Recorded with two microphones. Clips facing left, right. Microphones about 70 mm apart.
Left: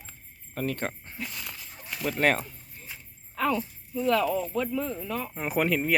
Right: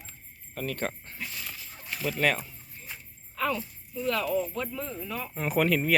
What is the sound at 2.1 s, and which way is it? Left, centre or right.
Speech, left.